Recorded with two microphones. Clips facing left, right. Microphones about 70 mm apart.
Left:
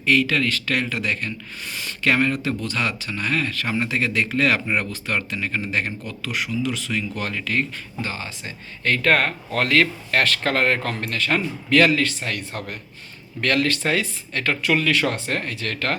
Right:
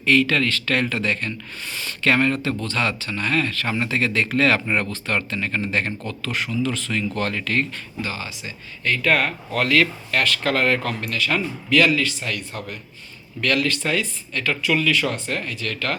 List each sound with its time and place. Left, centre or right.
0.0 s speech: centre
8.0 s speech: left